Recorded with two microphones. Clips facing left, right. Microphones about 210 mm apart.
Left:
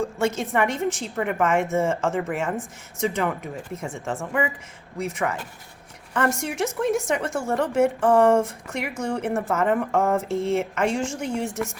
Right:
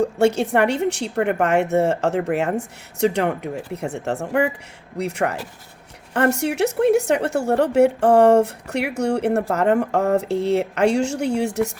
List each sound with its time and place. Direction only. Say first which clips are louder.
0.0 s a woman's voice: right 7 dB; 65° right (ahead or behind)
10.5 s speech: right 6 dB; 35° right (ahead or behind)
11.3 s a woman's voice: right 6 dB; 70° right (ahead or behind)